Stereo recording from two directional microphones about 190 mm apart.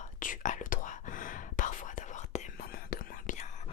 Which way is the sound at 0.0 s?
45° left (ahead or behind).